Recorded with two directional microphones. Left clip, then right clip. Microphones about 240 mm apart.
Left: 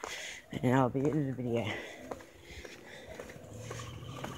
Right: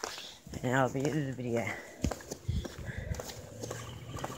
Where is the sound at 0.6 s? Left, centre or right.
Left.